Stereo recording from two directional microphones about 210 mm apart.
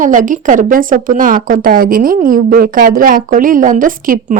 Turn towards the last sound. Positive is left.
turn(degrees=-40)  # may be behind; listen again after turning